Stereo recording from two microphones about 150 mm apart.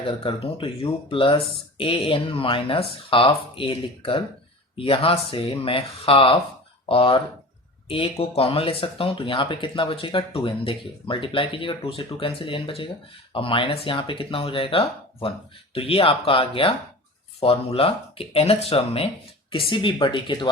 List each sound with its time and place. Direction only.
0.0 s speech: 35° left (ahead or behind)